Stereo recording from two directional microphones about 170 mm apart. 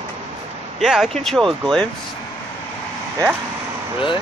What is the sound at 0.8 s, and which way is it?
Speech, centre (ahead or behind).